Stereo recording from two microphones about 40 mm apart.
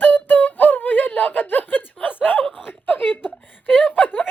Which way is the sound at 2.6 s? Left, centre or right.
Left.